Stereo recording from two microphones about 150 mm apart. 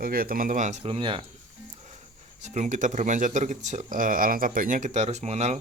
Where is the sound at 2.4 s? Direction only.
50° right (ahead or behind).